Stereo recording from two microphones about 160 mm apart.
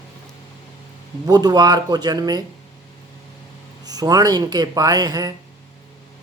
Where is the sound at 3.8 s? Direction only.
25° right (ahead or behind).